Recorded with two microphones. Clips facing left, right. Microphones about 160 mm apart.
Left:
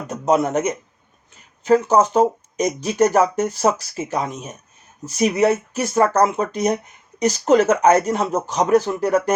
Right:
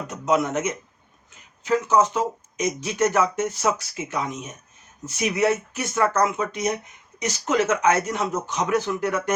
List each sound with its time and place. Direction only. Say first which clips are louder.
0.1 s speech: left 5 dB; 35° left (ahead or behind)